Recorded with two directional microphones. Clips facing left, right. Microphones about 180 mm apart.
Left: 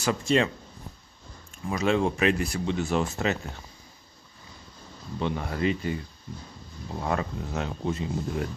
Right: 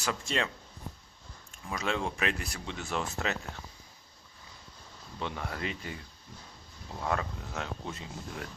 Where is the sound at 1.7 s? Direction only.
5° left (ahead or behind).